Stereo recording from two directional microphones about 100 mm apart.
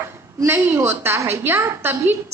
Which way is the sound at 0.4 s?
25° right (ahead or behind).